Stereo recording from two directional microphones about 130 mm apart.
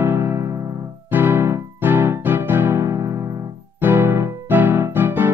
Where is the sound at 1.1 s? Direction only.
15° right (ahead or behind).